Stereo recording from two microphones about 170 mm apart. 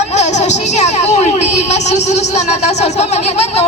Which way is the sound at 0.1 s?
40° left (ahead or behind).